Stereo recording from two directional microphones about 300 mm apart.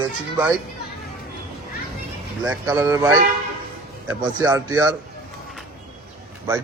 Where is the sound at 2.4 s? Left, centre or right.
Centre.